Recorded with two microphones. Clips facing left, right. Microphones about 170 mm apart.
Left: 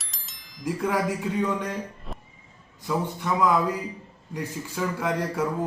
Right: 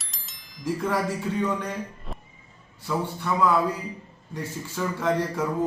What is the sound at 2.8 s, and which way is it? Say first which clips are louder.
Speech: left 1 dB; 15° left (ahead or behind).